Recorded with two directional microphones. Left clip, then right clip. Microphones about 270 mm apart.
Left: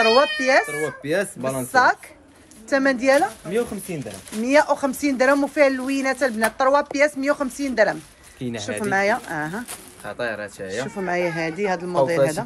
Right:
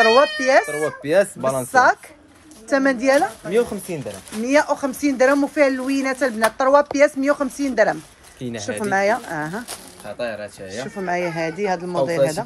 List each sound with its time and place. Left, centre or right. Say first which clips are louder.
0.0 s speech: right 2 dB; centre
0.7 s speech: right 5 dB; centre
3.4 s speech: right 4 dB; right
4.4 s speech: even; centre